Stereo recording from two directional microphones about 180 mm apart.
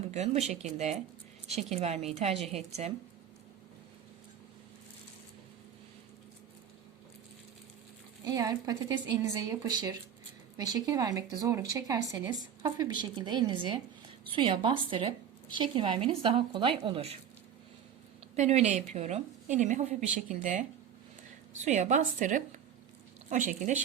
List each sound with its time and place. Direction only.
0.1 s a woman's voice: 40° right (ahead or behind)
8.2 s speech: 20° right (ahead or behind)
18.3 s a woman's voice: 40° right (ahead or behind)